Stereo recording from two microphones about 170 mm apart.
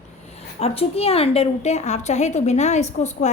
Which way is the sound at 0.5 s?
35° left (ahead or behind).